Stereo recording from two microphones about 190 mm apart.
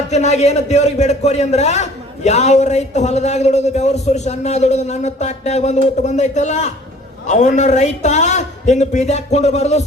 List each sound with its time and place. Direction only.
0.1 s a man's voice: 35° left (ahead or behind)